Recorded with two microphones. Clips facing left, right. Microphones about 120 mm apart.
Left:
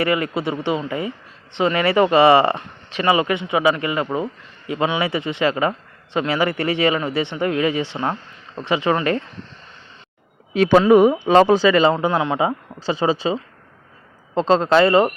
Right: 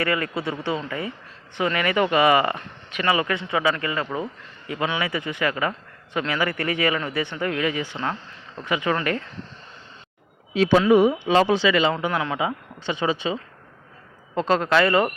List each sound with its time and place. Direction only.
0.0 s speech: 20° left (ahead or behind)
10.5 s speech: 55° left (ahead or behind); by 11.9 s 40° left (ahead or behind)
11.9 s speech: 25° left (ahead or behind)
14.3 s speech: 25° left (ahead or behind)